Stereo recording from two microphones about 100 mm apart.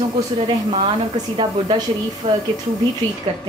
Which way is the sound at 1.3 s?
45° right (ahead or behind).